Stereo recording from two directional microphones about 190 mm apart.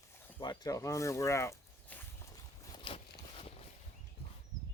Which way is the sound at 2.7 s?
30° left (ahead or behind).